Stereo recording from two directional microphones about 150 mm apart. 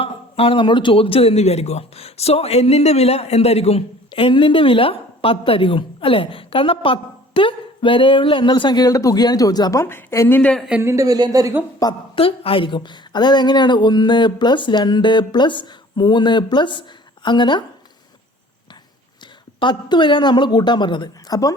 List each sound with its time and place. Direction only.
0.0 s speech: 40° left (ahead or behind)
9.8 s a woman's voice: 15° left (ahead or behind)
10.7 s a woman's voice: 15° right (ahead or behind)
11.8 s a woman's voice: 25° left (ahead or behind)
12.1 s speech: 40° left (ahead or behind)
19.2 s speech: 30° left (ahead or behind)